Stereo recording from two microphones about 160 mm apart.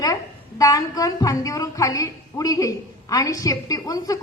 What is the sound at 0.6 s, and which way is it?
A woman's voice, 20° left (ahead or behind).